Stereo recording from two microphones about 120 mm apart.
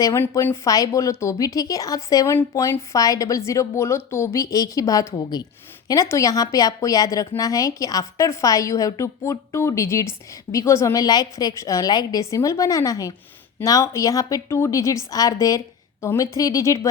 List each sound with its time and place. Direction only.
0.0 s a woman's voice: 25° left (ahead or behind)